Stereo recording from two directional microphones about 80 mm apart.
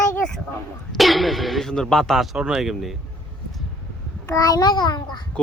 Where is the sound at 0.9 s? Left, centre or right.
Centre.